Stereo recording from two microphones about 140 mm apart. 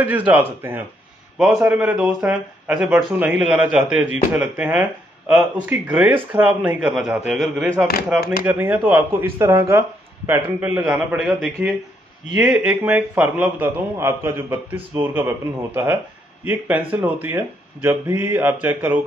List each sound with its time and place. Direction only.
0.6 s speech: 20° right (ahead or behind)
1.4 s a man's voice: 10° right (ahead or behind)